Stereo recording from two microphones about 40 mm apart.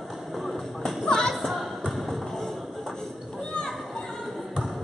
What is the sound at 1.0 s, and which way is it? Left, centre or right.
Music, centre.